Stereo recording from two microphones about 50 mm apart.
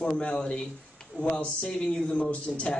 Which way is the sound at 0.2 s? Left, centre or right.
Centre.